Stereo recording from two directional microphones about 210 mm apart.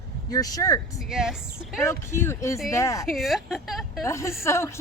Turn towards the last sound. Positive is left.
turn(degrees=15)  # may be behind; listen again after turning